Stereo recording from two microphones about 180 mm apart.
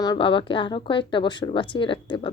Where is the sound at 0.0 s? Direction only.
25° left (ahead or behind).